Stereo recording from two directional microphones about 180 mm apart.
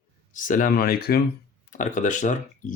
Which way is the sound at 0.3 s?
45° left (ahead or behind).